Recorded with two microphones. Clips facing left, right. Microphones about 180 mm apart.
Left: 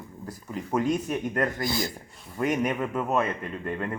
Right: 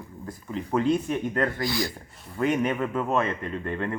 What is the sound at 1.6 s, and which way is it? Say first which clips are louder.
Speech: right 1 dB; 20° left (ahead or behind).